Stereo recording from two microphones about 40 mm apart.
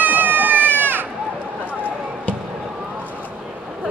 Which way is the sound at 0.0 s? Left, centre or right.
Right.